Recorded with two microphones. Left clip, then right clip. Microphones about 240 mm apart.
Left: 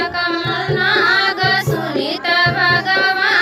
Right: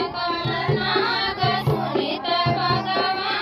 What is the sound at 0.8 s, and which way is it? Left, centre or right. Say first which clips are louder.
Music: left 11 dB; left.